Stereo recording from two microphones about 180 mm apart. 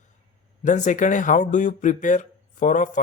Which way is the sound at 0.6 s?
45° left (ahead or behind).